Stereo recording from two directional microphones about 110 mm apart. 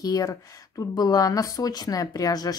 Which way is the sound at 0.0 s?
35° left (ahead or behind).